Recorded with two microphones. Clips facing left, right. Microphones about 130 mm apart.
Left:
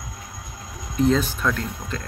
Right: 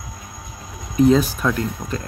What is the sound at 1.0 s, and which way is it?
Speech, 5° right (ahead or behind).